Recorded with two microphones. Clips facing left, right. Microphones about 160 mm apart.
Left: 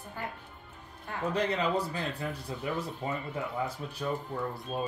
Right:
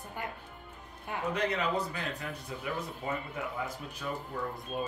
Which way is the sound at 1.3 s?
30° left (ahead or behind).